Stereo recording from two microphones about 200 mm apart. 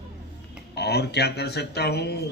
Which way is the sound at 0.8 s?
55° left (ahead or behind).